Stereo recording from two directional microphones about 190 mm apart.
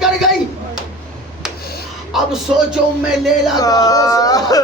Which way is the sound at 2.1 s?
5° right (ahead or behind).